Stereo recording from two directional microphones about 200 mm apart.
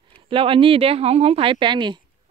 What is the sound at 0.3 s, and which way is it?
Speech, 25° right (ahead or behind).